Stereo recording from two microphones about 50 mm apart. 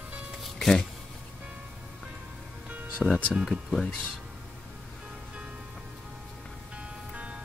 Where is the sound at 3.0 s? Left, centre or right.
Left.